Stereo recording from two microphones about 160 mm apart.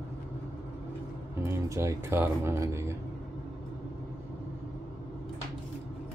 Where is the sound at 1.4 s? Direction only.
20° right (ahead or behind).